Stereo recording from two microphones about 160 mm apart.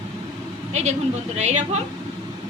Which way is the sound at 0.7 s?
45° right (ahead or behind).